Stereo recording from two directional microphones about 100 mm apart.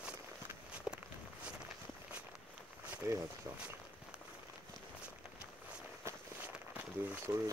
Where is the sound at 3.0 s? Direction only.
30° right (ahead or behind).